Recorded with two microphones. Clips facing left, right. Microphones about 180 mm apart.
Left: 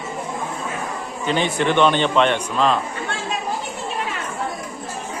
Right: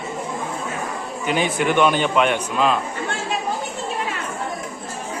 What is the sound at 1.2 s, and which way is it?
A man's voice, 10° right (ahead or behind).